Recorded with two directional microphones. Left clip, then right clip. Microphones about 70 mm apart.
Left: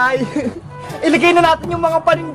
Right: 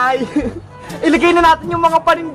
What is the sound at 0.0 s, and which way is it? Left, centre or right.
Speech, right.